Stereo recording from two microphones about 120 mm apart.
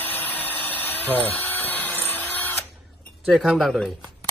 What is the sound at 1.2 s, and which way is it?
Printer, 15° left (ahead or behind).